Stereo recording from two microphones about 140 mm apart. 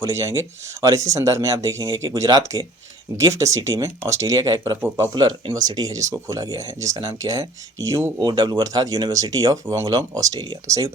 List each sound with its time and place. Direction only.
0.0 s speech: 20° right (ahead or behind)